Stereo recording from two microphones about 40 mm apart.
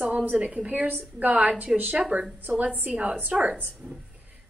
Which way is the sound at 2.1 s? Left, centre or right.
Right.